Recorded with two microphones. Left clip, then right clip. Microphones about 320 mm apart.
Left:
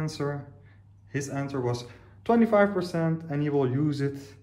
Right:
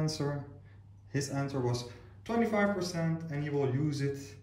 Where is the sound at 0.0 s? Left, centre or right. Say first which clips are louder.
Left 3 dB; centre.